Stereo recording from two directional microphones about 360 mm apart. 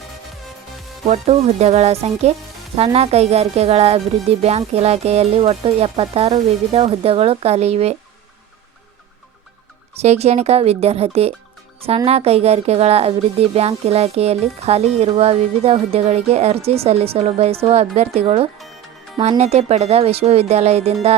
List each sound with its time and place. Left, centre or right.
1.0 s a woman's voice: centre
9.9 s a woman's voice: centre